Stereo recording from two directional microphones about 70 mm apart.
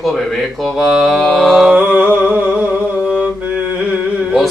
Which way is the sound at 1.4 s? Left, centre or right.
Centre.